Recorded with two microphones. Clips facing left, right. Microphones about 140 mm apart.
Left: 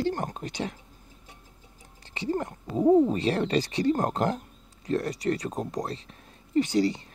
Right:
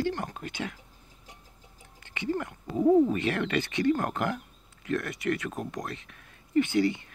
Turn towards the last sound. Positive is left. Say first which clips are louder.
# left 1 dB
turn(degrees=35)  # may be behind; listen again after turning